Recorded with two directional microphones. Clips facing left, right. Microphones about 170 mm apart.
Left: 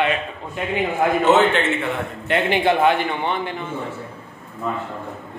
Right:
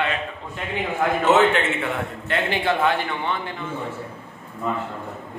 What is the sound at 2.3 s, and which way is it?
A man's voice, 20° left (ahead or behind).